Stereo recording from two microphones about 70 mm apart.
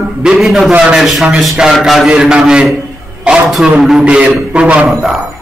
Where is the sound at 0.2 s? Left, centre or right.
Centre.